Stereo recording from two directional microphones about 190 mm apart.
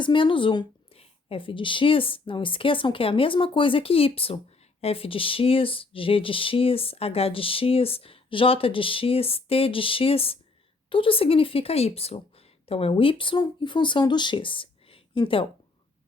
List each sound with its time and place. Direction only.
0.0 s speech: 25° left (ahead or behind)